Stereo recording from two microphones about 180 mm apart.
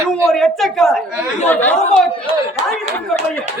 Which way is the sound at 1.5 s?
10° left (ahead or behind).